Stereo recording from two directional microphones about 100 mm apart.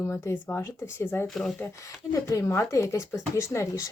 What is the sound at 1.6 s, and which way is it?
Speech, 30° left (ahead or behind).